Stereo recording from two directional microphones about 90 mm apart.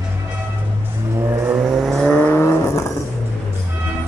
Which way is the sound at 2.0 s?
15° left (ahead or behind).